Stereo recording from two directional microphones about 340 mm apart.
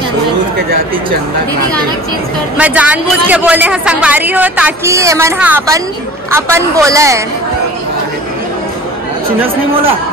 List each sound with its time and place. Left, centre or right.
2.5 s a woman's voice: centre